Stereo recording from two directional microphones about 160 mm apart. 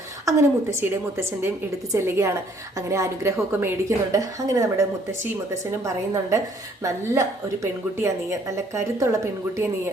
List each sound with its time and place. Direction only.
0.3 s a woman's voice: 15° right (ahead or behind)
6.8 s a woman's voice: 20° right (ahead or behind)